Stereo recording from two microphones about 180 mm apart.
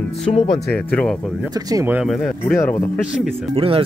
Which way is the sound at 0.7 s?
10° left (ahead or behind).